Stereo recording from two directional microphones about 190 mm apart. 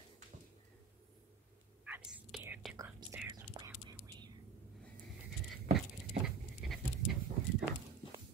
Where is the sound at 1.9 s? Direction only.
5° right (ahead or behind).